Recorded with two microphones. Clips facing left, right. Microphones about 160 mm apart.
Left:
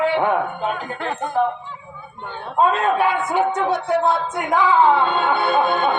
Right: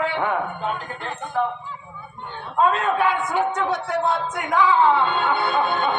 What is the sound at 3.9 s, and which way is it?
Speech, 25° left (ahead or behind).